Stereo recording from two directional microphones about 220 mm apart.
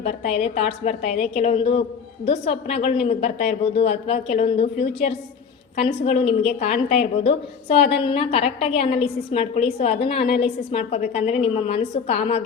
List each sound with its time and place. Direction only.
0.0 s a woman's voice: 30° left (ahead or behind)